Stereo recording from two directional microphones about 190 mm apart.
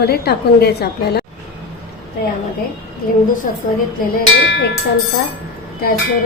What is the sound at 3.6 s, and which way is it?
Speech, 45° left (ahead or behind).